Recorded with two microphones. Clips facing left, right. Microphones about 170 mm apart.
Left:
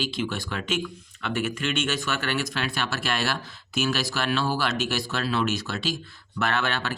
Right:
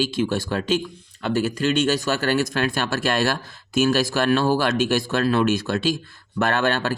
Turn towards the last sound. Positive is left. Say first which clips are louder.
# right 6 dB
turn(degrees=-45)  # may be behind; listen again after turning